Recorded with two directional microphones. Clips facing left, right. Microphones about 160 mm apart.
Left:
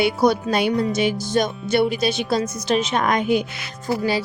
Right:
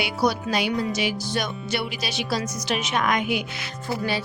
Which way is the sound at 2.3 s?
35° left (ahead or behind).